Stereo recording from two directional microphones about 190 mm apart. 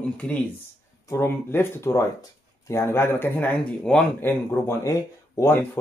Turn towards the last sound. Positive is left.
turn(degrees=10)  # may be behind; listen again after turning